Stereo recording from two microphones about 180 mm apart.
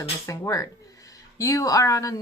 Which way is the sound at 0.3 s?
15° left (ahead or behind).